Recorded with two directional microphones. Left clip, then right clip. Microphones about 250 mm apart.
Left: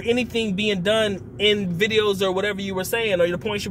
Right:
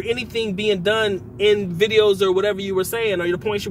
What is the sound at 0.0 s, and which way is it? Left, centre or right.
Speech, centre.